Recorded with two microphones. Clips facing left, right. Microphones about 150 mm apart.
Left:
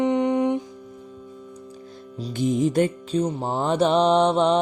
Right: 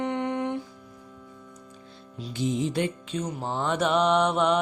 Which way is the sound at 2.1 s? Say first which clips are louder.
Left 5 dB; 45° left (ahead or behind).